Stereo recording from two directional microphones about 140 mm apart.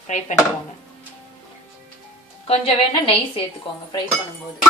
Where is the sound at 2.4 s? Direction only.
45° left (ahead or behind).